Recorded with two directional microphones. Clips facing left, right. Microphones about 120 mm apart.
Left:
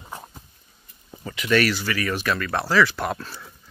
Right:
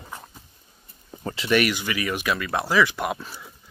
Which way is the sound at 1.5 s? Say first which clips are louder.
Left 1 dB; 15° right (ahead or behind).